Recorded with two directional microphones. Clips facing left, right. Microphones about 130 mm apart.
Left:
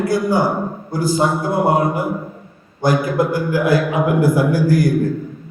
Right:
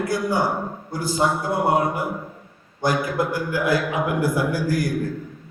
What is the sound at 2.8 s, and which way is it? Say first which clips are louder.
A man's voice: left 5 dB; 40° left (ahead or behind).